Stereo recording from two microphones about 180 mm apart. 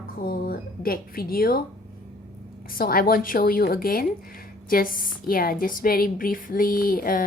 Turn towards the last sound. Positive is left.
turn(degrees=50)  # may be behind; listen again after turning